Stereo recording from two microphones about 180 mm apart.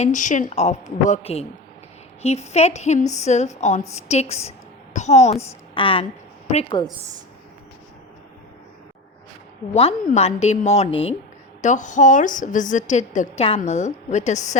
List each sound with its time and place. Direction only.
0.0 s a woman's voice: 45° left (ahead or behind)
10.1 s a woman's voice: 35° left (ahead or behind)